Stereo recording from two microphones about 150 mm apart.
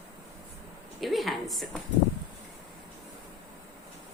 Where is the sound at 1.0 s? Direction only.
Centre (ahead or behind).